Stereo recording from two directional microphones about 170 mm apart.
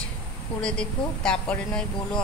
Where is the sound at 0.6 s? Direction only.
5° left (ahead or behind).